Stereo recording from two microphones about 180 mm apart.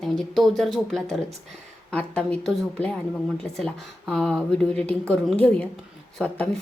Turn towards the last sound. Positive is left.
turn(degrees=5)  # may be behind; listen again after turning